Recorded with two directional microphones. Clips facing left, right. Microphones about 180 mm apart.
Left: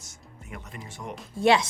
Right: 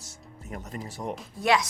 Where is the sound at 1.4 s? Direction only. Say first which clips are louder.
Left 3 dB; 25° left (ahead or behind).